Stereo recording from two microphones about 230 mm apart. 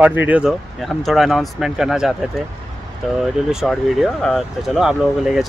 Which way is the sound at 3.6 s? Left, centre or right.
Centre.